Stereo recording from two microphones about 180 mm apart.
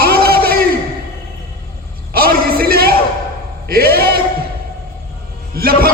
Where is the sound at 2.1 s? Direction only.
55° right (ahead or behind).